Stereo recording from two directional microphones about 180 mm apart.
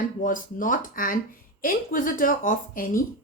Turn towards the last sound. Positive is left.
turn(degrees=50)  # may be behind; listen again after turning